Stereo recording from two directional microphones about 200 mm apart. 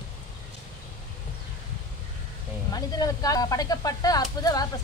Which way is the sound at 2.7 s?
20° left (ahead or behind).